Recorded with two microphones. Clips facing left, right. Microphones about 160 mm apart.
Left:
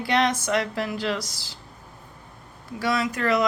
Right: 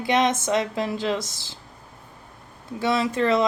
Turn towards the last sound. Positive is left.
turn(degrees=-25)  # may be behind; listen again after turning